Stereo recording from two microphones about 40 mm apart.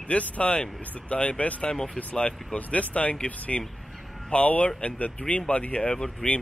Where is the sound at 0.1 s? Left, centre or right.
Left.